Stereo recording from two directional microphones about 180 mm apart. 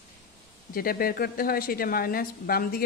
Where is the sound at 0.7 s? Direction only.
55° left (ahead or behind).